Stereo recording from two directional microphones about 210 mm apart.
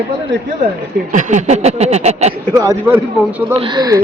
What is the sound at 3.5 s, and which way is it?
Speech, 25° right (ahead or behind).